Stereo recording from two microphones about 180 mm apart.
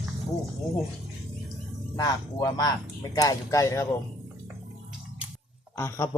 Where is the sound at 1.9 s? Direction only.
20° left (ahead or behind).